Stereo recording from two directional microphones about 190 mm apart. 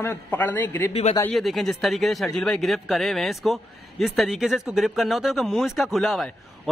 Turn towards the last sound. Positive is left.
turn(degrees=0)  # may be behind; listen again after turning